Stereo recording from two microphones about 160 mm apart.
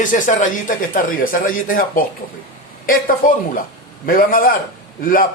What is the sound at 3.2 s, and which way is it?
Speech, 60° left (ahead or behind).